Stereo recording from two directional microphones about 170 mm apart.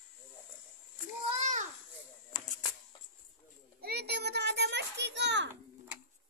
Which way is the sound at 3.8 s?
70° right (ahead or behind).